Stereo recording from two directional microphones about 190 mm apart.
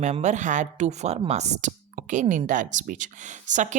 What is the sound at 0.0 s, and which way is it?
Speech, 40° right (ahead or behind).